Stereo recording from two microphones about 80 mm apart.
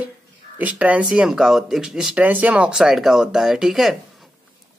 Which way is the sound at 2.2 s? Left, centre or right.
Centre.